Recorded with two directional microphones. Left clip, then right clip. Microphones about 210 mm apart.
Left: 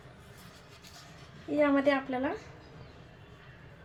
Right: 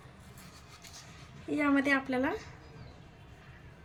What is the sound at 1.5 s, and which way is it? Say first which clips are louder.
Speech: left 2 dB; 25° right (ahead or behind).